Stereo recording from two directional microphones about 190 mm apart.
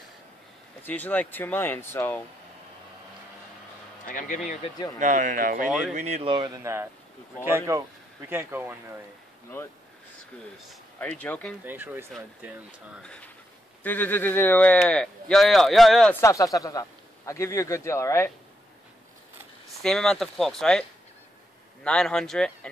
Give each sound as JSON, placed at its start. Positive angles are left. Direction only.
{"t": 0.8, "sound": "speech", "side_deg": 10}
{"t": 4.0, "sound": "speech", "side_deg": 45}
{"t": 4.9, "sound": "speech", "side_deg": -45}
{"t": 5.7, "sound": "speech", "side_deg": 0}
{"t": 5.9, "sound": "speech", "side_deg": -35}
{"t": 10.7, "sound": "speech", "side_deg": 5}
{"t": 11.6, "sound": "speech", "side_deg": -10}
{"t": 13.0, "sound": "speech", "side_deg": 5}
{"t": 16.2, "sound": "speech", "side_deg": 15}
{"t": 19.8, "sound": "speech", "side_deg": 5}
{"t": 21.8, "sound": "speech", "side_deg": 5}